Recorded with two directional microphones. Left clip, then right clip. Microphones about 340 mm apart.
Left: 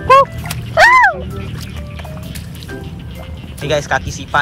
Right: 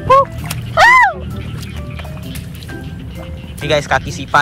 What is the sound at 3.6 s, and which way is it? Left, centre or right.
Speech, centre.